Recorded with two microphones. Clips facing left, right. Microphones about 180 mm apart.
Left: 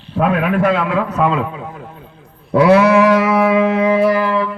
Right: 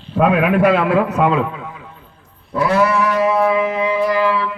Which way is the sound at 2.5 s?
75° left (ahead or behind).